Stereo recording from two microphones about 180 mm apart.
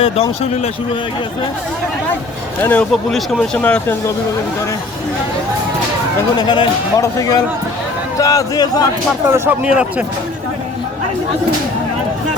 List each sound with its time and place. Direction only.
0.0 s speech: 35° left (ahead or behind)
2.6 s speech: 10° left (ahead or behind)
6.3 s speech: 25° left (ahead or behind)
9.3 s speech: 10° right (ahead or behind)